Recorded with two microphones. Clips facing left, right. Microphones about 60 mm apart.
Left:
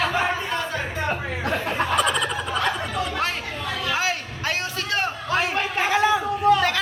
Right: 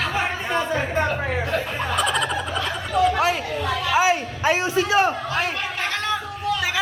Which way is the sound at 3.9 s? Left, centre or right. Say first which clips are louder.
Right 8 dB; centre.